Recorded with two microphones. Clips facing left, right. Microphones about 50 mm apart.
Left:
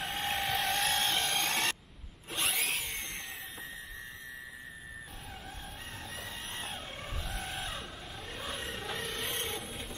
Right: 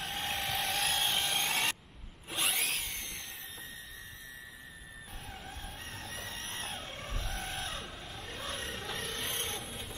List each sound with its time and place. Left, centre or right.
0.0 s vehicle: centre
2.3 s power tool: centre
6.1 s a sound: centre